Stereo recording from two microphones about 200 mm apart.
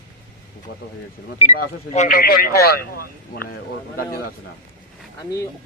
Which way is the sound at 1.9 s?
40° left (ahead or behind).